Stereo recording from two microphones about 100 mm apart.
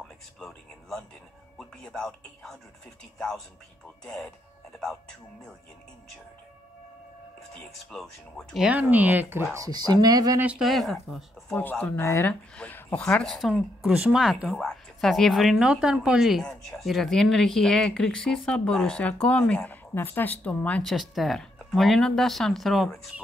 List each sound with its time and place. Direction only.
0.0 s a sound: 5° left (ahead or behind)
1.6 s speech: 5° left (ahead or behind)
7.5 s speech: 5° left (ahead or behind)
8.8 s speech: 20° right (ahead or behind)
9.7 s speech: 45° right (ahead or behind)
10.6 s speech: centre (ahead or behind)
12.0 s speech: 25° left (ahead or behind)
12.5 s speech: 15° left (ahead or behind)
19.9 s speech: 20° left (ahead or behind)
20.8 s speech: centre (ahead or behind)